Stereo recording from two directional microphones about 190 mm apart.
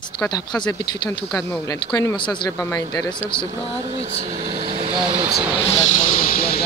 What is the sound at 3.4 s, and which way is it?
Speech, 20° right (ahead or behind).